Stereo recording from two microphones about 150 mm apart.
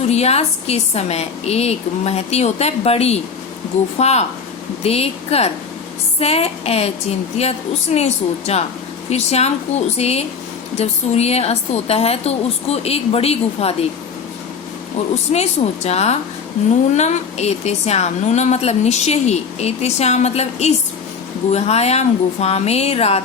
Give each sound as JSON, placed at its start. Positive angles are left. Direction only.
{"t": 0.1, "sound": "a woman's voice", "side_deg": 45}
{"t": 7.9, "sound": "a woman's voice", "side_deg": 45}
{"t": 15.3, "sound": "a woman's voice", "side_deg": 45}